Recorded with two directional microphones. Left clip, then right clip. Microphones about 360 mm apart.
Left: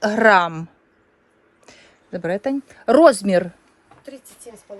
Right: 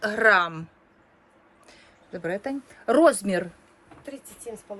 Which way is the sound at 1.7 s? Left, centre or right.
Left.